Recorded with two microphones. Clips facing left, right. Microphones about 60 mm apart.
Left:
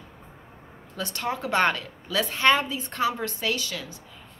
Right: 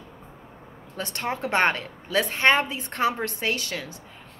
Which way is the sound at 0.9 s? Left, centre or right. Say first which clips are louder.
Even; right.